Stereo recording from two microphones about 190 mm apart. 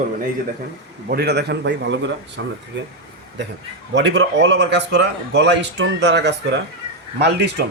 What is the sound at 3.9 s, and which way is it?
A man's voice, 65° right (ahead or behind).